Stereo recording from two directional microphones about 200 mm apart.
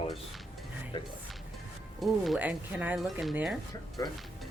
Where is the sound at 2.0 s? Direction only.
Centre (ahead or behind).